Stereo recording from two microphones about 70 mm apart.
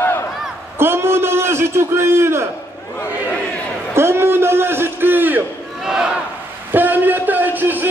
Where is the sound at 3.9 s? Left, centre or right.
Right.